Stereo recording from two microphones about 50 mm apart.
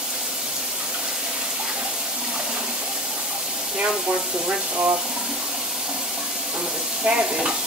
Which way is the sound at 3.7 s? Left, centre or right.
Centre.